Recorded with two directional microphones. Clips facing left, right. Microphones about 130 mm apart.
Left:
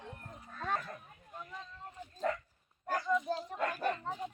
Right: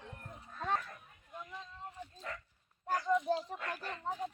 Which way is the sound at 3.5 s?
60° left (ahead or behind).